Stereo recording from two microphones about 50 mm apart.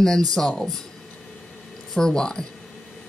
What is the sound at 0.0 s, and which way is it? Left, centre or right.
Speech, centre.